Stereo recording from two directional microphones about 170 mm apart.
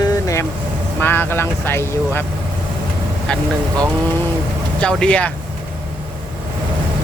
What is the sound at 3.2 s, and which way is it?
Speech, 5° left (ahead or behind).